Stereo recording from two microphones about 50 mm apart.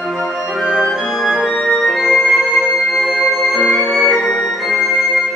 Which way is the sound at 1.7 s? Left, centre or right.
Centre.